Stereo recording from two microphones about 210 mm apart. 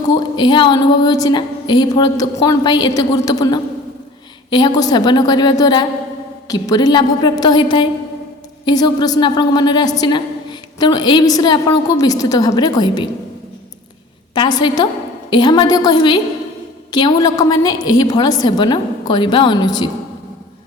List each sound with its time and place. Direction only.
0.1 s a woman's voice: 20° left (ahead or behind)
14.3 s a woman's voice: 20° left (ahead or behind)